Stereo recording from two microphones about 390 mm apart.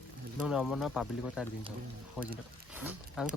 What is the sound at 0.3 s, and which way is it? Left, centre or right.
Speech, centre.